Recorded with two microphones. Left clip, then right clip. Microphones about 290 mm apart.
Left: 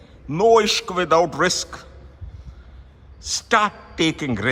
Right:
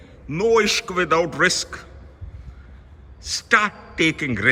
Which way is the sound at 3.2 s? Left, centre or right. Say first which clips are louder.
Even; centre.